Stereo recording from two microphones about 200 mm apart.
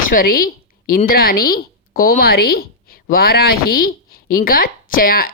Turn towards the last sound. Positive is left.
turn(degrees=45)  # may be behind; listen again after turning